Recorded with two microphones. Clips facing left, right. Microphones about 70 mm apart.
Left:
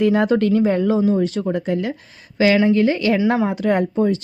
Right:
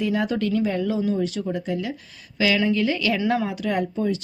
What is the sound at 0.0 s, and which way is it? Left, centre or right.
Speech, left.